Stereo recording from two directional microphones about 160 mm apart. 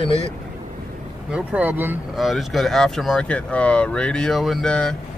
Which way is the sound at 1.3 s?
10° right (ahead or behind).